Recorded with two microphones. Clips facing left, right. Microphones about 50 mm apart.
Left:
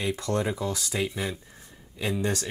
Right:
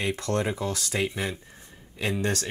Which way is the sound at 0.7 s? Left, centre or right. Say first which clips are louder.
Even; right.